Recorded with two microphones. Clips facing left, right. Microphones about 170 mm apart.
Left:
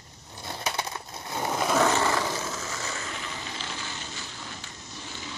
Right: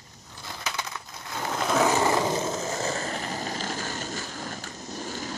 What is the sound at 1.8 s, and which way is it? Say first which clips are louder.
Roar: right 4 dB; 15° right (ahead or behind).